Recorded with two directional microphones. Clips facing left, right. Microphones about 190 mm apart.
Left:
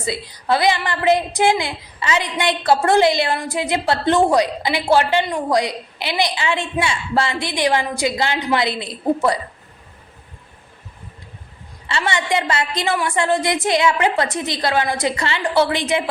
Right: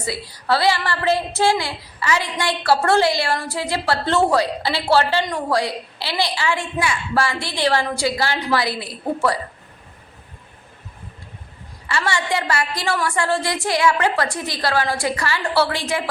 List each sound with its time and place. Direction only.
0.0 s speech: 20° left (ahead or behind)
11.9 s speech: 20° left (ahead or behind)